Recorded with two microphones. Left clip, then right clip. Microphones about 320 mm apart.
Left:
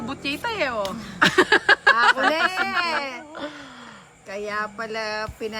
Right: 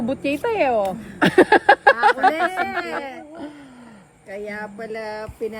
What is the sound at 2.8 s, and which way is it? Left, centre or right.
Speech, left.